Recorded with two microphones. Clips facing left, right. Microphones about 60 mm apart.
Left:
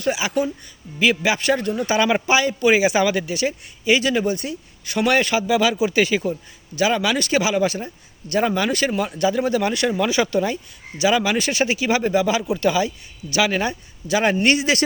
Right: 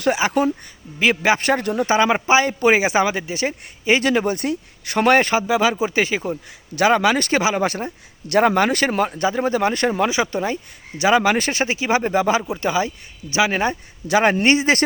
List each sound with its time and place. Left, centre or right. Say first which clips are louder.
0.2 s speech: right 3 dB; right
1.6 s speech: right 2 dB; right
1.9 s speech: right 2 dB; right
2.5 s speech: even; right
6.7 s speech: right 4 dB; right
10.1 s speech: left 1 dB; right
10.9 s speech: right 3 dB; right